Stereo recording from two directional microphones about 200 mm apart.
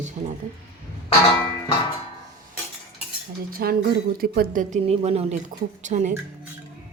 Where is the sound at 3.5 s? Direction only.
45° right (ahead or behind).